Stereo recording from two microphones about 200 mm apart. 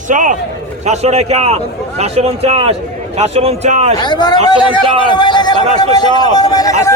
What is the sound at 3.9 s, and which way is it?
A man's voice, 20° left (ahead or behind).